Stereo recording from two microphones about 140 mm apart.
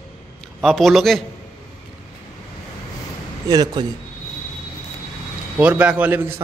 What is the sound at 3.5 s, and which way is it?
Speech, 30° right (ahead or behind).